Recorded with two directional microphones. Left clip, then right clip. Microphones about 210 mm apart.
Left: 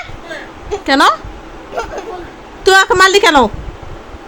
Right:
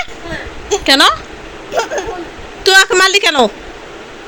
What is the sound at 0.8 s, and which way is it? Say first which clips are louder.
Speech: right 1 dB; 10° left (ahead or behind).